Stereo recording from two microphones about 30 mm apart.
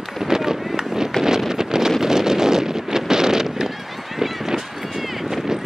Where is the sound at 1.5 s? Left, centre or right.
Centre.